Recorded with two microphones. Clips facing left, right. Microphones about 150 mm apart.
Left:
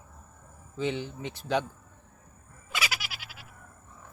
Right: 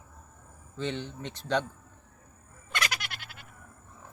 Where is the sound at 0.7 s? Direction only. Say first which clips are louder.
Left 3 dB; 10° left (ahead or behind).